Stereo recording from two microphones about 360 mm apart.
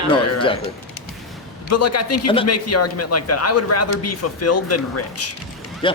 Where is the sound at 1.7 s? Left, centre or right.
Left.